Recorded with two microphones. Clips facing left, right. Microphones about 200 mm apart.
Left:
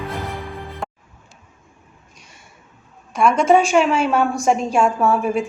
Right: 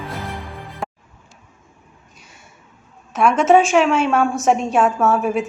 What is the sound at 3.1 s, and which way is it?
A woman's voice, 5° right (ahead or behind).